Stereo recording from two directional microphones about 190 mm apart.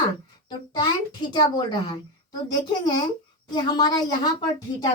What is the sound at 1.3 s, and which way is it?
Speech, 25° left (ahead or behind).